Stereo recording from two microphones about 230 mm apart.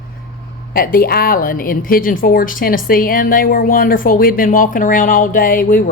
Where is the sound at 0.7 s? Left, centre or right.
Left.